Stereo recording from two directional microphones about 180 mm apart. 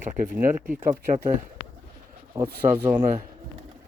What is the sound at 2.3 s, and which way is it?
Speech, 25° right (ahead or behind).